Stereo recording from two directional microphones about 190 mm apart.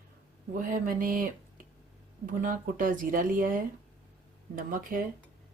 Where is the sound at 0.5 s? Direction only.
45° right (ahead or behind).